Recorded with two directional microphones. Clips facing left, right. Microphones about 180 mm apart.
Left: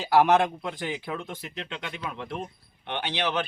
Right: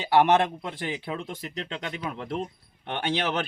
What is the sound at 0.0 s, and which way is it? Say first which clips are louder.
Speech: even; centre (ahead or behind).